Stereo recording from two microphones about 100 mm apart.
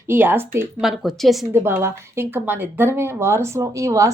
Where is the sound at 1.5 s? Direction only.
25° right (ahead or behind).